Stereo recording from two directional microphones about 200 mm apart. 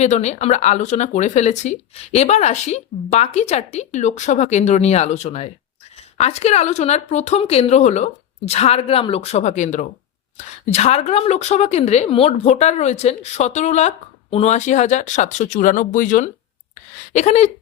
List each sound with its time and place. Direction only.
0.0 s a woman's voice: 35° left (ahead or behind)